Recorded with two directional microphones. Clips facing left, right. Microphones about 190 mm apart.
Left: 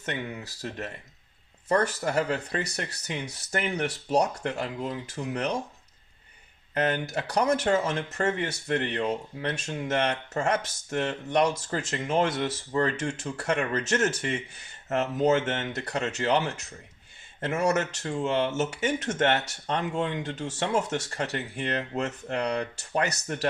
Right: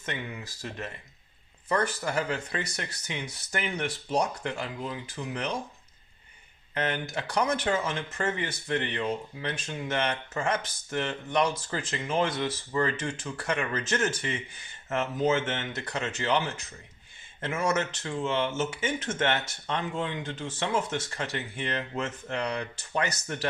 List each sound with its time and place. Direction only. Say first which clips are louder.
0.0 s speech: left 3 dB; 40° left (ahead or behind)
6.7 s speech: left 4 dB; 40° left (ahead or behind)